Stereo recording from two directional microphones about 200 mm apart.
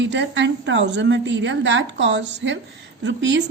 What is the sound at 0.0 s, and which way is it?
A woman's voice, 65° right (ahead or behind).